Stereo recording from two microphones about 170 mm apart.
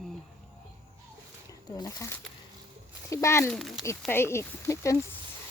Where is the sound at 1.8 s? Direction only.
15° left (ahead or behind).